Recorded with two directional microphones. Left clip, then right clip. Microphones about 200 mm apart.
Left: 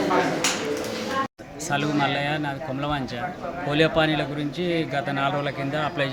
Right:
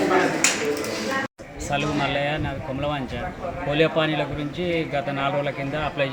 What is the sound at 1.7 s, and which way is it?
Speech, 15° left (ahead or behind).